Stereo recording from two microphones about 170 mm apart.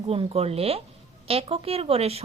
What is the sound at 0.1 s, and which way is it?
A woman's voice, 35° right (ahead or behind).